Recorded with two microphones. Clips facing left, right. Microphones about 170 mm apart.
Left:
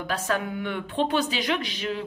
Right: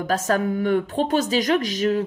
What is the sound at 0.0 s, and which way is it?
Speech, 45° right (ahead or behind).